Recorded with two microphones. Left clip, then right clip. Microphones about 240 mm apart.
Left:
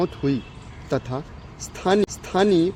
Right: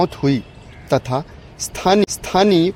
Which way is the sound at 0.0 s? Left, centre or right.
Right.